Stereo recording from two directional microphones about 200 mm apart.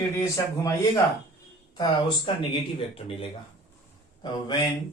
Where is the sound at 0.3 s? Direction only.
15° left (ahead or behind).